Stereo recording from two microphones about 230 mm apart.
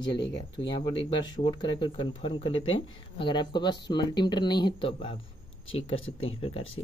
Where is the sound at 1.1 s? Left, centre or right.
Centre.